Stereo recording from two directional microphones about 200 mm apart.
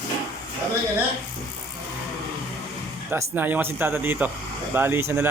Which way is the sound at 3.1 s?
10° right (ahead or behind).